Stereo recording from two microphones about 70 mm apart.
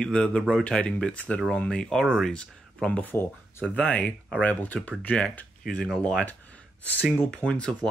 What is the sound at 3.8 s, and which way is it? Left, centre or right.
Speech, centre.